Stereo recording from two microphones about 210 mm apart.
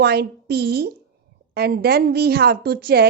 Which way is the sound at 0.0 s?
50° right (ahead or behind).